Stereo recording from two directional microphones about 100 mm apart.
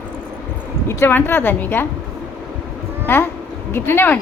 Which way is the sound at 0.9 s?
25° left (ahead or behind).